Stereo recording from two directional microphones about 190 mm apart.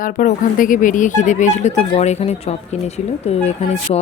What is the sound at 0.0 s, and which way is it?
Speech, 45° left (ahead or behind).